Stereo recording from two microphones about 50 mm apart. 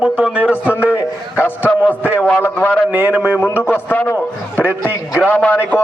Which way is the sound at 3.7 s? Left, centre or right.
Left.